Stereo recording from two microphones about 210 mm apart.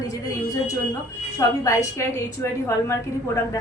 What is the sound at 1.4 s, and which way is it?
A woman's voice, 15° left (ahead or behind).